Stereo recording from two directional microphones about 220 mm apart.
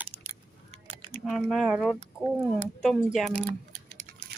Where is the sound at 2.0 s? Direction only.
25° right (ahead or behind).